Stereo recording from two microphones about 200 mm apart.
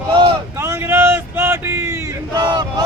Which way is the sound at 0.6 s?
10° right (ahead or behind).